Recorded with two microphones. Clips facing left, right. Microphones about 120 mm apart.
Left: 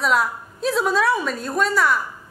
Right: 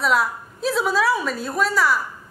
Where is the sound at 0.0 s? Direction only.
Centre (ahead or behind).